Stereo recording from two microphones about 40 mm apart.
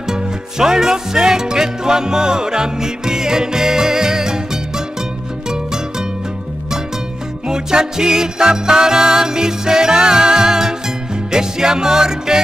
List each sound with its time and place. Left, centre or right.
0.0 s music: centre
7.4 s music: centre